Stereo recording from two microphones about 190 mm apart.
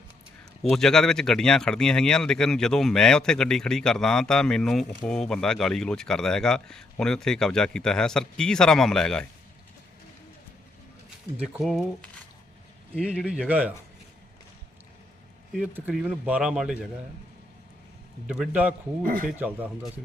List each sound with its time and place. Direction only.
0.6 s speech: centre (ahead or behind)
11.3 s speech: 5° right (ahead or behind)
12.9 s speech: 5° right (ahead or behind)
15.5 s speech: 5° right (ahead or behind)
18.3 s speech: 5° right (ahead or behind)
19.0 s speech: 50° right (ahead or behind)
19.4 s speech: 10° right (ahead or behind)